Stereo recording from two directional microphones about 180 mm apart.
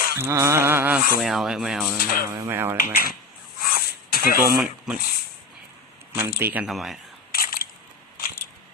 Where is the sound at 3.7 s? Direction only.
55° left (ahead or behind).